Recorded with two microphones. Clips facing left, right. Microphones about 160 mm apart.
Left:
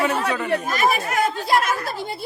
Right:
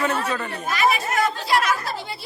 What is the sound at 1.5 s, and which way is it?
Speech, 50° left (ahead or behind).